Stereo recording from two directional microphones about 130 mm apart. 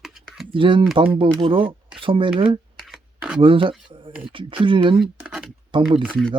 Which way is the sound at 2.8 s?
5° right (ahead or behind).